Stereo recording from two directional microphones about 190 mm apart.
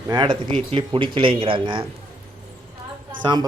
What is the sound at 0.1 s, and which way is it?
Speech, 25° right (ahead or behind).